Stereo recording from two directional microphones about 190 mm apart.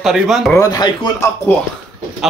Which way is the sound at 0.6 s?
20° left (ahead or behind).